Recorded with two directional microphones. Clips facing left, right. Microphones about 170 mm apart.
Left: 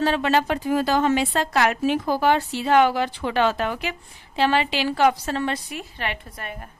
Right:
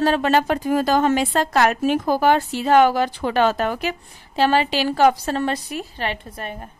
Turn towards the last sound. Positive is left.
turn(degrees=-30)  # may be behind; listen again after turning